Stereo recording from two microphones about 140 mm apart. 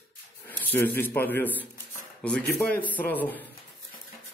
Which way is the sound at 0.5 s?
15° left (ahead or behind).